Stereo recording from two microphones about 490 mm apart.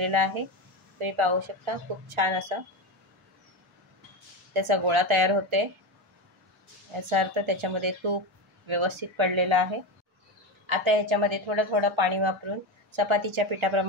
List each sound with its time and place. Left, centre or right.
0.0 s a woman's voice: right
4.6 s a woman's voice: right
7.1 s a woman's voice: right